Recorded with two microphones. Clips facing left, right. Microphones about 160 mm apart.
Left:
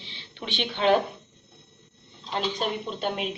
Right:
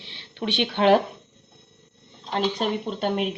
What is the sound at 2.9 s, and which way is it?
Speech, 60° right (ahead or behind).